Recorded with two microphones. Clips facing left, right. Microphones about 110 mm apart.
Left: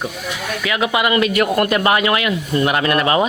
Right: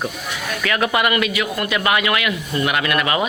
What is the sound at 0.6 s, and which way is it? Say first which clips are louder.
Speech: even; 15° left (ahead or behind).